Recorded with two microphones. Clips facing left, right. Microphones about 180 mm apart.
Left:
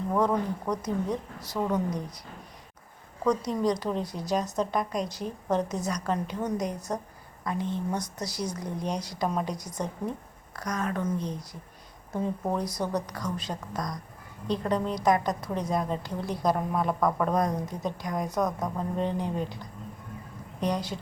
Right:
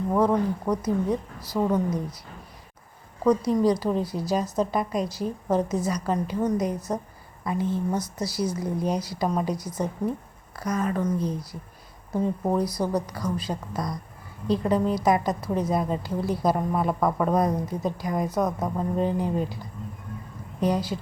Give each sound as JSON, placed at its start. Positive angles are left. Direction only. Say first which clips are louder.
{"t": 0.1, "sound": "a woman's voice", "louder": "right 4 dB", "side_deg": -5}
{"t": 3.2, "sound": "a woman's voice", "louder": "right 5 dB", "side_deg": -5}